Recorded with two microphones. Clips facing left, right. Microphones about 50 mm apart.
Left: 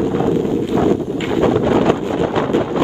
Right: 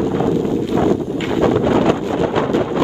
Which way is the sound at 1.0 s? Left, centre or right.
Centre.